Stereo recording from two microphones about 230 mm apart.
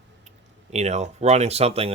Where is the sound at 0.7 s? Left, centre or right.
Right.